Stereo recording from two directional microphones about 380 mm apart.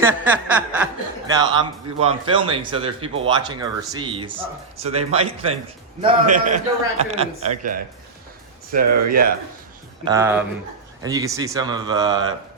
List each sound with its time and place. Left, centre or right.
0.0 s chuckle: centre
1.3 s a man's voice: centre
10.0 s a man's voice: centre